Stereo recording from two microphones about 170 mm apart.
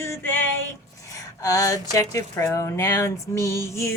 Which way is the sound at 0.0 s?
15° left (ahead or behind).